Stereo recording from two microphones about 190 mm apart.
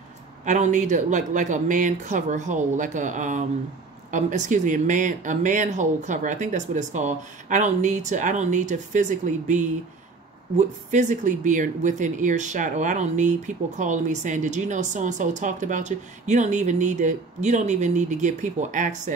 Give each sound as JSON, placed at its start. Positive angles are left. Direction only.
{"t": 0.5, "sound": "speech", "side_deg": -40}
{"t": 10.9, "sound": "speech", "side_deg": -40}